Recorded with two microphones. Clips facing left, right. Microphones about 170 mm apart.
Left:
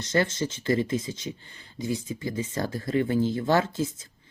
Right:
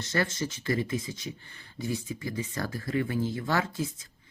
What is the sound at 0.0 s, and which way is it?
Speech, 20° left (ahead or behind).